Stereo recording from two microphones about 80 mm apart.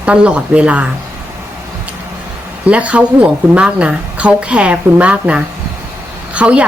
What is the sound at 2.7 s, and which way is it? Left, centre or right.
A woman's voice, centre.